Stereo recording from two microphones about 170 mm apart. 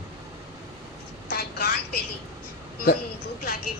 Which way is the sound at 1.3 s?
65° left (ahead or behind).